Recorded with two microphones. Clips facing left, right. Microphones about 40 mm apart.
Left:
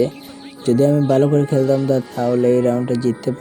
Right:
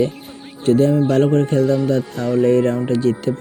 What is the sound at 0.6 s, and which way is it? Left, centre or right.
Speech, right.